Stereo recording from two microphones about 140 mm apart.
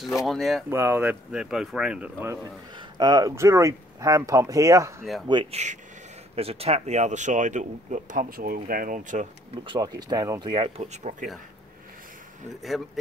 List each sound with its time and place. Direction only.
0.3 s speech: centre (ahead or behind)
0.7 s speech: 15° right (ahead or behind)
2.8 s speech: 30° right (ahead or behind)
5.3 s speech: 35° right (ahead or behind); by 9.3 s 65° right (ahead or behind)
9.7 s speech: 30° right (ahead or behind)
10.5 s speech: 45° right (ahead or behind)